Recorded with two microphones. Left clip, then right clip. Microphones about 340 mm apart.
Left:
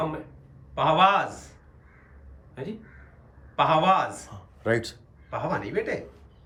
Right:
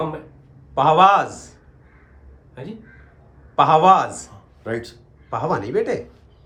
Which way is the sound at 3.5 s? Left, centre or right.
Centre.